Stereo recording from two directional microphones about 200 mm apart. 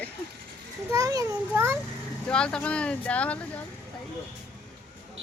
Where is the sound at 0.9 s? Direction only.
15° right (ahead or behind).